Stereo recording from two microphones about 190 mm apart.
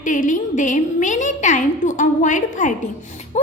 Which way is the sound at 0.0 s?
40° left (ahead or behind).